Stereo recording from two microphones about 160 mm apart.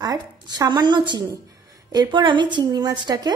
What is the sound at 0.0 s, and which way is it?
A woman's voice, 25° right (ahead or behind).